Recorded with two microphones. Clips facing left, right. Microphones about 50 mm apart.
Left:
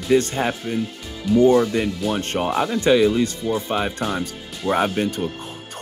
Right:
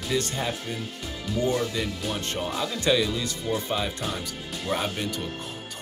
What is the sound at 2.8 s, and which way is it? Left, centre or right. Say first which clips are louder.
Speech: left 8 dB; left.